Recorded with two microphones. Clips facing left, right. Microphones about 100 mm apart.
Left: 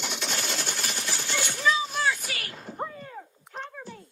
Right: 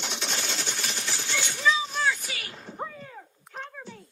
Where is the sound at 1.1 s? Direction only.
50° left (ahead or behind).